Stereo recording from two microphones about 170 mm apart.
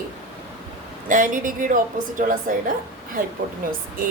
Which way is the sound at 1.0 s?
50° right (ahead or behind).